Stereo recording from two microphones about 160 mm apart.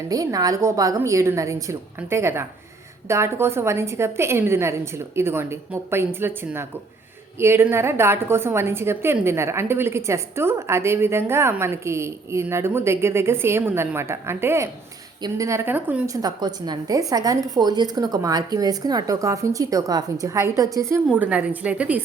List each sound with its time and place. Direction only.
0.1 s a woman's voice: 20° right (ahead or behind)
16.1 s a woman's voice: 25° right (ahead or behind); by 22.0 s 10° right (ahead or behind)